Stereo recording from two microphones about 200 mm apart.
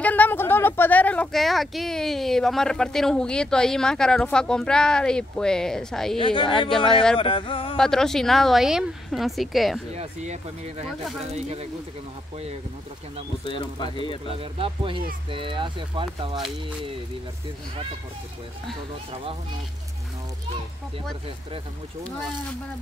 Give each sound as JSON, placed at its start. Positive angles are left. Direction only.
{"t": 0.0, "sound": "speech", "side_deg": 10}
{"t": 6.1, "sound": "speech", "side_deg": 25}
{"t": 7.7, "sound": "speech", "side_deg": 5}
{"t": 9.9, "sound": "speech", "side_deg": -35}
{"t": 13.5, "sound": "speech", "side_deg": 25}
{"t": 14.3, "sound": "speech", "side_deg": -25}